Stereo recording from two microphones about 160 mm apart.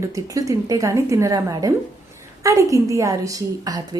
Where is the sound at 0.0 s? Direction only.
20° right (ahead or behind).